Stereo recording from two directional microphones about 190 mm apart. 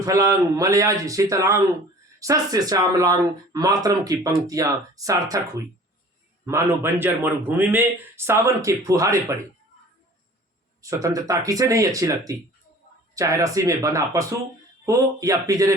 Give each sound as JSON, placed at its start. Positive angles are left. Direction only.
{"t": 0.0, "sound": "a man's voice", "side_deg": -15}
{"t": 6.4, "sound": "a man's voice", "side_deg": -15}
{"t": 10.8, "sound": "a man's voice", "side_deg": -15}